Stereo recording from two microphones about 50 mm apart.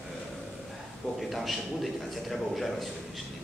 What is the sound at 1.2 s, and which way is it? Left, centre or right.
A man's voice, centre.